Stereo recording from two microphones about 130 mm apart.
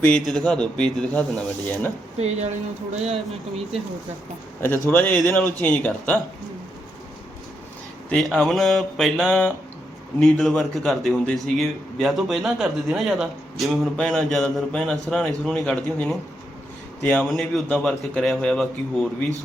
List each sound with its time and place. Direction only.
0.0 s a man's voice: centre (ahead or behind)
2.1 s speech: 55° right (ahead or behind)
4.6 s speech: 15° left (ahead or behind)
8.1 s a man's voice: 5° left (ahead or behind)